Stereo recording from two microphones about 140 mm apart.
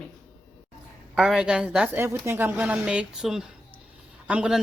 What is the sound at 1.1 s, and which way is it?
A woman's voice, 5° right (ahead or behind).